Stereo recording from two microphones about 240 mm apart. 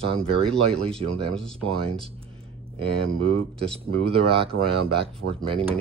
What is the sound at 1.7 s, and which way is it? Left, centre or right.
Speech, right.